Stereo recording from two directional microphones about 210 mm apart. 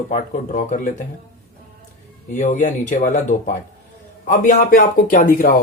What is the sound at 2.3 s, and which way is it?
A man's voice, 40° left (ahead or behind).